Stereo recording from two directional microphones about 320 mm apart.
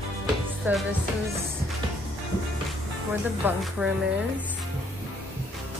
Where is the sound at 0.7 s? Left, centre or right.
Centre.